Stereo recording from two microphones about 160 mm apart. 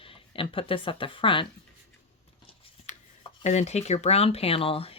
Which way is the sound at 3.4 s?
45° left (ahead or behind).